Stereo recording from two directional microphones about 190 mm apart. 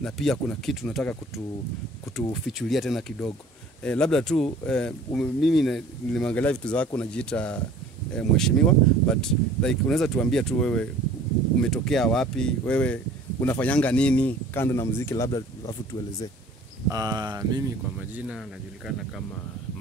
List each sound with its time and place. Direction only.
0.0 s speech: 5° left (ahead or behind)
16.9 s speech: 20° right (ahead or behind)
17.9 s speech: 5° right (ahead or behind)